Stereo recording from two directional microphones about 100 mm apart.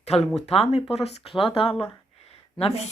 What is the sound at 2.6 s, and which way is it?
Speech, 90° left.